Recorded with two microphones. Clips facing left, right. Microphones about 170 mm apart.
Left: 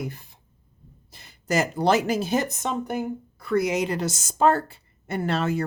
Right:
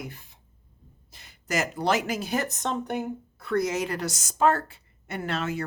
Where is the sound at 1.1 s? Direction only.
30° left (ahead or behind); by 3.6 s centre (ahead or behind).